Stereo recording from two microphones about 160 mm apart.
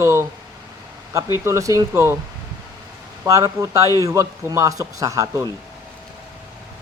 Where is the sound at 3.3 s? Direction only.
20° right (ahead or behind).